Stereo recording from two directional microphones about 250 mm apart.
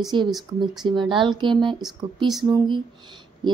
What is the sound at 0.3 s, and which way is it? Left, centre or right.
Speech, centre.